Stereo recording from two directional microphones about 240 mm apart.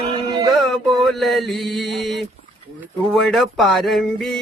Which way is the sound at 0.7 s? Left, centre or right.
Centre.